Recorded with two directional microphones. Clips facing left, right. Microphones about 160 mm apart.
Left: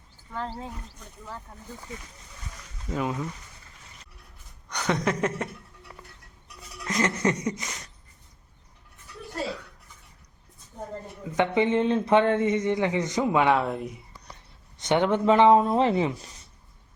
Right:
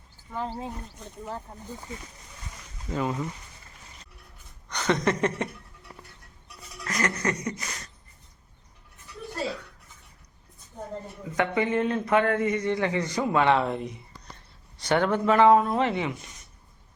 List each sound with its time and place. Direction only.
0.3 s speech: 10° right (ahead or behind)
0.5 s speech: 25° right (ahead or behind)
2.9 s speech: centre (ahead or behind)
4.7 s chuckle: 10° left (ahead or behind)
6.8 s speech: 20° left (ahead or behind)
11.3 s speech: 25° left (ahead or behind); by 14.0 s 5° left (ahead or behind)
14.8 s speech: 20° left (ahead or behind)